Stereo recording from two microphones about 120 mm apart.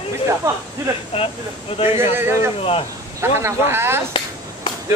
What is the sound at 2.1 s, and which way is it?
Speech, 20° right (ahead or behind).